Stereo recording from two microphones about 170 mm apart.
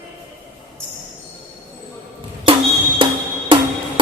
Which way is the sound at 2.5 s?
30° right (ahead or behind).